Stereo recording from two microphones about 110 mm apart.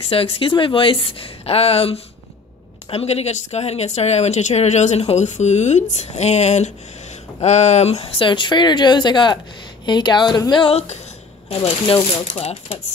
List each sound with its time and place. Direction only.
0.1 s speech: 60° left (ahead or behind); by 10.7 s 40° left (ahead or behind)
10.7 s speech: 75° left (ahead or behind)
11.4 s speech: 60° left (ahead or behind)
12.1 s speech: 70° left (ahead or behind)